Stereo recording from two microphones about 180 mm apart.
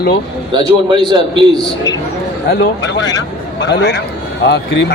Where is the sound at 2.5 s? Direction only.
75° left (ahead or behind).